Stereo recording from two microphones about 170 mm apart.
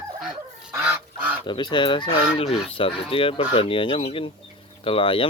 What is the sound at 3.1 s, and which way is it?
Speech, 30° left (ahead or behind).